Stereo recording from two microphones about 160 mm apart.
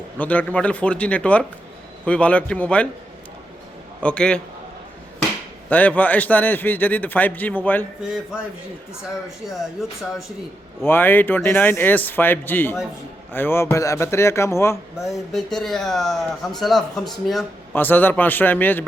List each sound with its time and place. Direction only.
0.2 s a man's voice: 10° left (ahead or behind)
4.0 s speech: 5° left (ahead or behind)
5.6 s a man's voice: 10° left (ahead or behind)
9.5 s speech: centre (ahead or behind)
10.8 s a man's voice: 10° left (ahead or behind)
14.9 s speech: centre (ahead or behind)
17.7 s a man's voice: 10° left (ahead or behind)